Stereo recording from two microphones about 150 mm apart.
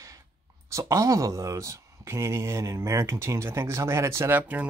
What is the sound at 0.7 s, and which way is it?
Speech, 20° right (ahead or behind).